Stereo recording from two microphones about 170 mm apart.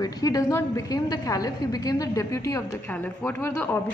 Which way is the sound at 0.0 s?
20° left (ahead or behind).